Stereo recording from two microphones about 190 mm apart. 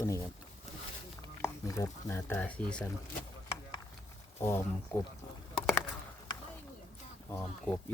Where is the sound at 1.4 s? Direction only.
15° left (ahead or behind).